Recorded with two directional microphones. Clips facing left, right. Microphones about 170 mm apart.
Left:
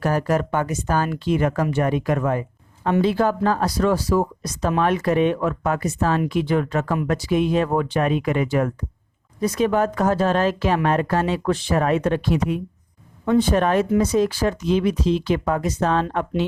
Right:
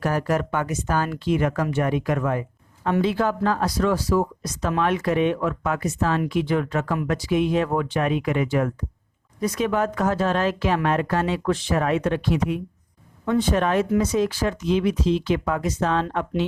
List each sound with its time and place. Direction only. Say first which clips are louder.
0.0 s speech: left 2 dB; 35° left (ahead or behind)